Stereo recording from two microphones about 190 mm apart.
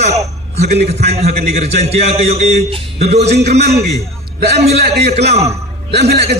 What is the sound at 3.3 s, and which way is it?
Speech, 60° right (ahead or behind).